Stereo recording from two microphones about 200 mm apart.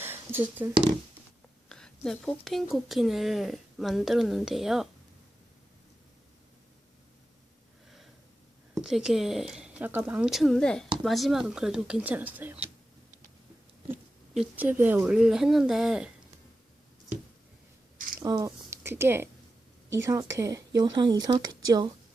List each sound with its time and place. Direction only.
0.0 s a sound: 10° right (ahead or behind)
1.7 s speech: 5° left (ahead or behind)
8.7 s speech: centre (ahead or behind)
13.9 s speech: 10° right (ahead or behind)
18.2 s a woman's voice: 15° right (ahead or behind)